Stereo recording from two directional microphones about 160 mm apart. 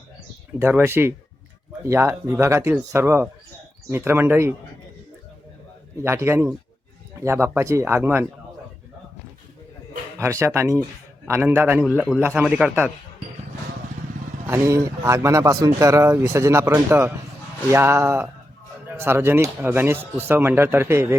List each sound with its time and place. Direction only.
0.6 s speech: 15° right (ahead or behind)
6.0 s speech: 15° right (ahead or behind)
10.2 s speech: 15° right (ahead or behind)
14.4 s speech: 15° right (ahead or behind)